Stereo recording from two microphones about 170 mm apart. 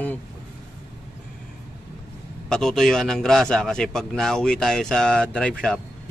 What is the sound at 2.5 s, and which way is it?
Speech, 5° left (ahead or behind).